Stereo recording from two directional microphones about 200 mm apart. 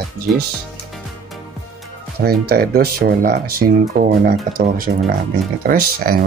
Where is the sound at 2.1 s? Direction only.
50° right (ahead or behind).